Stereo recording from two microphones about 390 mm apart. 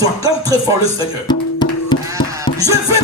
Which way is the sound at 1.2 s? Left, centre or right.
Centre.